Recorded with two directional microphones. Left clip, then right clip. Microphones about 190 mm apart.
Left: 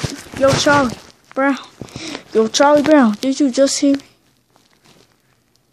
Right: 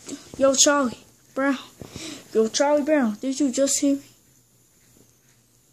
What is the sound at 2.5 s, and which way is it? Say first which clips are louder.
Speech: left 11 dB; 30° left (ahead or behind).